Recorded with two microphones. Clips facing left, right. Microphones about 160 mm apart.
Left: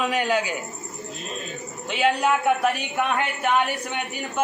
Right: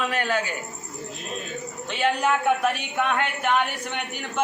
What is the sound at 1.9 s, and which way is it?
A woman's voice, 10° left (ahead or behind).